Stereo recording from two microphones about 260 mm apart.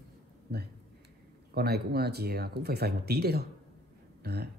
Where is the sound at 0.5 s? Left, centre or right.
Right.